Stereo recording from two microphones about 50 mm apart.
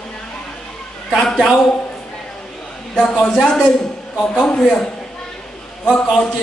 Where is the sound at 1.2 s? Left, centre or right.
Centre.